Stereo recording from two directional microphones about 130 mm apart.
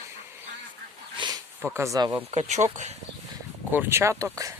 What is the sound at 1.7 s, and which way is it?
Speech, 25° right (ahead or behind).